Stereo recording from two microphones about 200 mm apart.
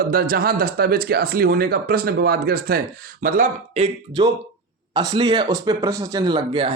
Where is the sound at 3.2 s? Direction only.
35° right (ahead or behind).